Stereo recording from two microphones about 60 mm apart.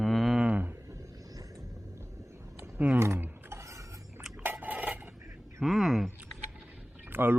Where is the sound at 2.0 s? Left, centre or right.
Right.